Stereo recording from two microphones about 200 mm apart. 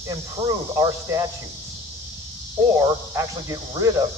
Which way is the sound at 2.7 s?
15° right (ahead or behind).